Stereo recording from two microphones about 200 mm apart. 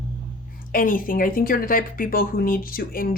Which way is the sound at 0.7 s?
45° left (ahead or behind).